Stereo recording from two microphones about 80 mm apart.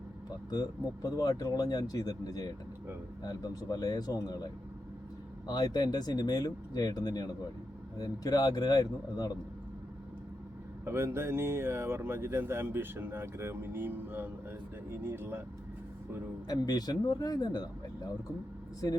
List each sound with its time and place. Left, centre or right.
0.5 s speech: left
5.5 s speech: left
10.8 s speech: right
16.5 s speech: left